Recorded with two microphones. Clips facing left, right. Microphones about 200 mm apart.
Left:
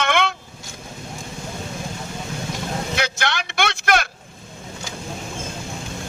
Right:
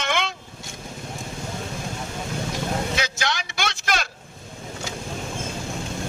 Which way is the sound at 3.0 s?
60° left (ahead or behind).